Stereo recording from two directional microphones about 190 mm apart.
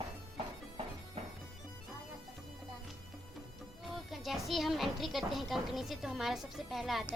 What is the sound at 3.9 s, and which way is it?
A woman's voice, centre (ahead or behind).